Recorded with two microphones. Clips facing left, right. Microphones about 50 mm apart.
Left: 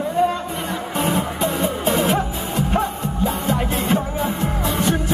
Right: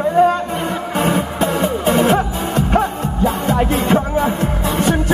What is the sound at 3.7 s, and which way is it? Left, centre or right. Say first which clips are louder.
Music: right 5 dB; right.